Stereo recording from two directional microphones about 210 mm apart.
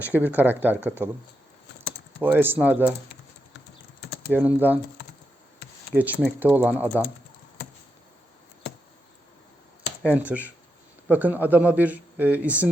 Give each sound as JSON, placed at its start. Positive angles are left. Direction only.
{"t": 0.0, "sound": "speech", "side_deg": -10}
{"t": 2.2, "sound": "speech", "side_deg": -10}
{"t": 4.0, "sound": "a sound", "side_deg": 55}
{"t": 4.3, "sound": "speech", "side_deg": -10}
{"t": 5.9, "sound": "speech", "side_deg": -10}
{"t": 10.0, "sound": "speech", "side_deg": -5}